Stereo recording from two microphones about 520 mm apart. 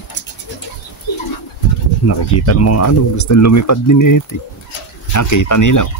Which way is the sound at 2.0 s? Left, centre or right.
Left.